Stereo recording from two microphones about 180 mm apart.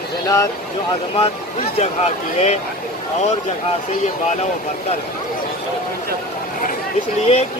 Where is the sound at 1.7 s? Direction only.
35° left (ahead or behind).